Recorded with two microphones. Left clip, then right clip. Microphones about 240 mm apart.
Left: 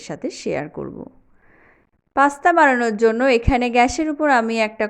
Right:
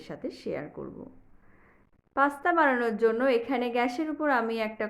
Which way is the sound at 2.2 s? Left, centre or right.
Left.